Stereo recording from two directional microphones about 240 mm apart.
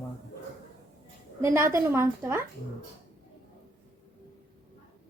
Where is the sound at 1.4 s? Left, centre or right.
Centre.